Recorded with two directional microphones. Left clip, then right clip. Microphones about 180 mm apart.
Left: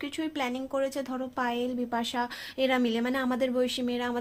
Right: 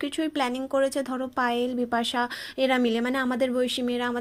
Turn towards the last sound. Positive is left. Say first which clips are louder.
# right 3 dB
turn(degrees=-20)  # may be behind; listen again after turning